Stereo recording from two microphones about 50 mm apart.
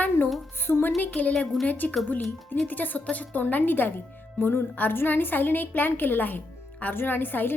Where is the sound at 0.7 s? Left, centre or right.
Left.